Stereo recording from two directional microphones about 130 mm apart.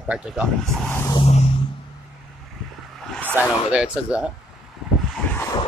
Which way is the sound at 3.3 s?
10° right (ahead or behind).